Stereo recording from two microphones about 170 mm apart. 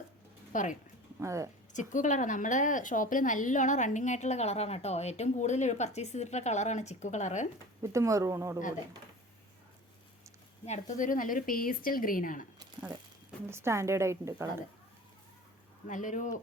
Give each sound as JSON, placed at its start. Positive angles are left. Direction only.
{"t": 0.5, "sound": "a woman's voice", "side_deg": 50}
{"t": 1.2, "sound": "a woman's voice", "side_deg": -15}
{"t": 1.7, "sound": "a woman's voice", "side_deg": 45}
{"t": 7.8, "sound": "a woman's voice", "side_deg": -20}
{"t": 10.7, "sound": "a woman's voice", "side_deg": 45}
{"t": 13.5, "sound": "a woman's voice", "side_deg": -15}
{"t": 15.9, "sound": "a woman's voice", "side_deg": 50}